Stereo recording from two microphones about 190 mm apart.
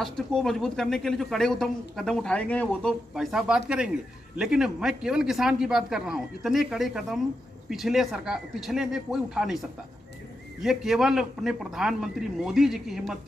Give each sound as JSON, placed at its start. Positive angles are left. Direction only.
{"t": 0.0, "sound": "speech", "side_deg": 0}
{"t": 10.6, "sound": "speech", "side_deg": 0}